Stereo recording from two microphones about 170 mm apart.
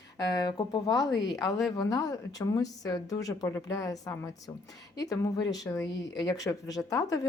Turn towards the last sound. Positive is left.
turn(degrees=20)  # may be behind; listen again after turning